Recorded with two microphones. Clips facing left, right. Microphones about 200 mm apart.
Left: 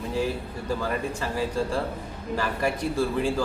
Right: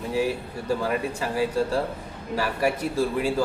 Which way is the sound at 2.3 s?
5° right (ahead or behind).